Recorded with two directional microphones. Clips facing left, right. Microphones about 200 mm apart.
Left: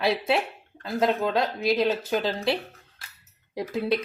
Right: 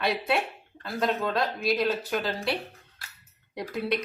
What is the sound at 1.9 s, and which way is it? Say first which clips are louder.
Speech: left 3 dB; 25° left (ahead or behind).